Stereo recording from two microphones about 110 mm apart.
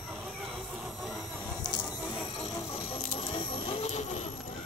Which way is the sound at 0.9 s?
Centre (ahead or behind).